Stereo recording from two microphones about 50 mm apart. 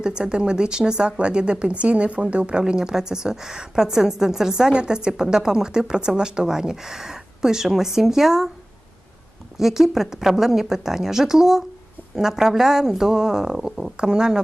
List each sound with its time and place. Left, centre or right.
0.0 s a woman's voice: centre
9.6 s a woman's voice: centre